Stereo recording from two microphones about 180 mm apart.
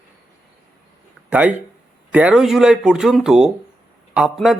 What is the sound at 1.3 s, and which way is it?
Speech, 10° right (ahead or behind).